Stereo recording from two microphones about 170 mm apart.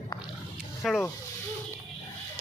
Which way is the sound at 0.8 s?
Centre (ahead or behind).